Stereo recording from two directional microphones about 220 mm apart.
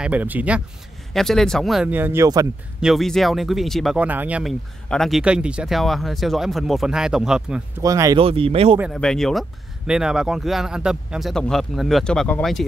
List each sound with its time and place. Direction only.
0.0 s speech: 5° right (ahead or behind)
2.8 s speech: centre (ahead or behind)
7.8 s speech: 15° right (ahead or behind)
8.7 s speech: centre (ahead or behind)